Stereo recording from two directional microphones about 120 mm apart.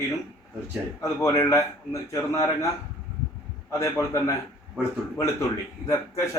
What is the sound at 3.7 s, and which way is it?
Speech, 25° left (ahead or behind).